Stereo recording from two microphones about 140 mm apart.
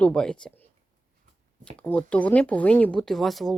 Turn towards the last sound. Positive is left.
turn(degrees=0)  # may be behind; listen again after turning